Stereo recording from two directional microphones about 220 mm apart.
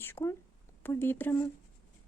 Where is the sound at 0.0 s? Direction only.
10° left (ahead or behind).